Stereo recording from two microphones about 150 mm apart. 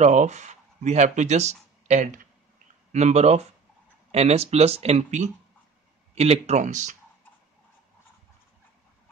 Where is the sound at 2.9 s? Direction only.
45° right (ahead or behind).